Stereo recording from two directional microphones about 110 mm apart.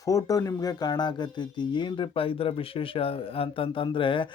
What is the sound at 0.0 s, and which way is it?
Speech, 30° left (ahead or behind).